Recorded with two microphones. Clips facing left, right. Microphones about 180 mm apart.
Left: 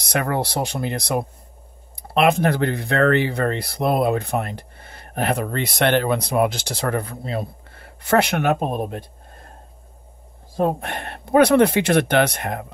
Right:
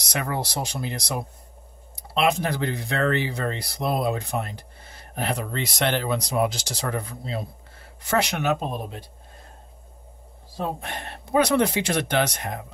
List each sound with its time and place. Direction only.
0.0 s speech: 60° left (ahead or behind)
10.5 s speech: 55° left (ahead or behind)